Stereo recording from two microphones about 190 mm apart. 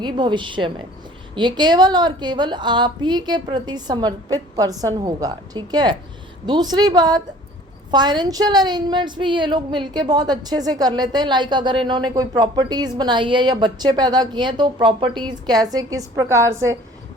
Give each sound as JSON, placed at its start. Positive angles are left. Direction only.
{"t": 0.0, "sound": "a woman's voice", "side_deg": -25}